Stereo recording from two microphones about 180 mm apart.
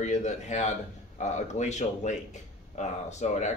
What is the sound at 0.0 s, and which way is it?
A man's voice, 40° left (ahead or behind).